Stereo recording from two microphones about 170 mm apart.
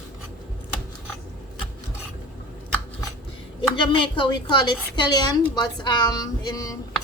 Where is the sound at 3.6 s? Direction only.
30° left (ahead or behind).